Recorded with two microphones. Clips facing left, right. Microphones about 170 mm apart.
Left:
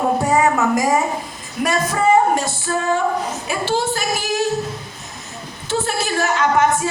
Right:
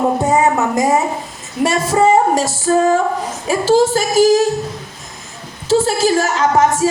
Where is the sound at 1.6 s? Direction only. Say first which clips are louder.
Right 4 dB; 25° right (ahead or behind).